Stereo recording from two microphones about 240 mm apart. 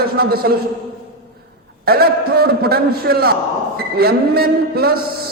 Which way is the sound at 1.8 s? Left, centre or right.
Right.